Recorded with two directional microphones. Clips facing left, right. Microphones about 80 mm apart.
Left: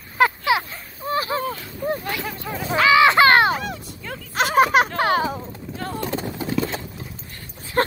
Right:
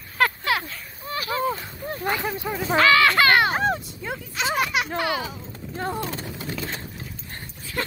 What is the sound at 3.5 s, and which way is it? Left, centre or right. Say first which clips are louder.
Dog: right 2 dB; right.